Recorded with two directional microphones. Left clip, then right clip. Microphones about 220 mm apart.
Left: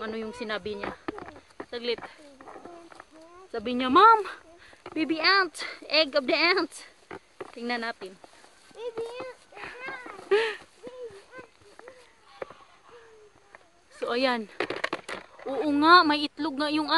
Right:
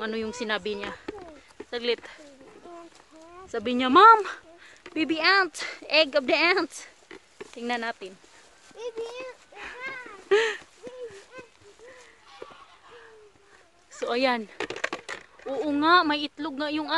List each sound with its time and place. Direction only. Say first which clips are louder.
0.0 s speech: right 3 dB; 35° right (ahead or behind)
3.5 s speech: right 2 dB; 25° right (ahead or behind); by 8.1 s 5° right (ahead or behind)
8.7 s a sound: even; 5° right (ahead or behind); by 11.0 s 25° right (ahead or behind)
13.9 s speech: right 1 dB; 5° right (ahead or behind)
14.5 s a sound: left 1 dB; centre (ahead or behind)
15.5 s speech: left 2 dB; 30° left (ahead or behind)